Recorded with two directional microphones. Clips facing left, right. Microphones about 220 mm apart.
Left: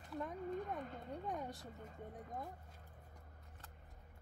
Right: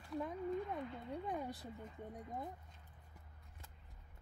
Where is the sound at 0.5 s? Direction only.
45° left (ahead or behind).